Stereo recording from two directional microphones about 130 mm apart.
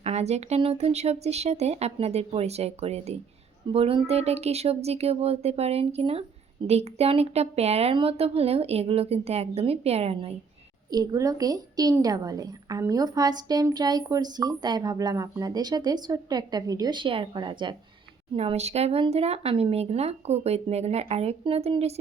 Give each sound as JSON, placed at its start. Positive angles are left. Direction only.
{"t": 0.0, "sound": "speech", "side_deg": -60}
{"t": 10.8, "sound": "a woman's voice", "side_deg": -30}
{"t": 18.3, "sound": "speech", "side_deg": -55}